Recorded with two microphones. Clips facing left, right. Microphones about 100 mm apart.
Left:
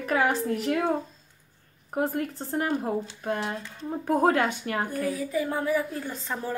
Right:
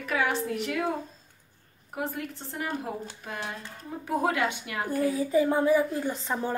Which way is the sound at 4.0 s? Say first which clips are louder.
Left 4 dB; 45° left (ahead or behind).